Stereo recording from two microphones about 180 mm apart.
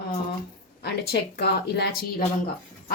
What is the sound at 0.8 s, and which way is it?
A woman's voice, 65° left (ahead or behind).